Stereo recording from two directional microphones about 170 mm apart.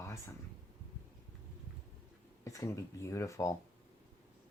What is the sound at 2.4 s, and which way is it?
Speech, 20° left (ahead or behind).